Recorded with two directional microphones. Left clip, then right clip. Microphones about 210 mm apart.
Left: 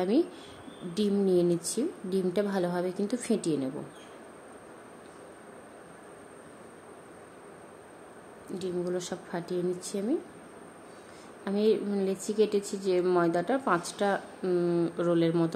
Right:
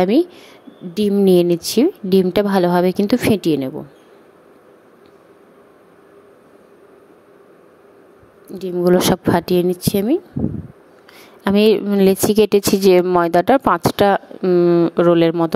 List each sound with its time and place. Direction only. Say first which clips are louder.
0.0 s a woman's voice: right 12 dB; 35° right (ahead or behind)
8.5 s a woman's voice: right 16 dB; 35° right (ahead or behind)
11.4 s a woman's voice: right 13 dB; 50° right (ahead or behind)
14.4 s speech: right 15 dB; 35° right (ahead or behind)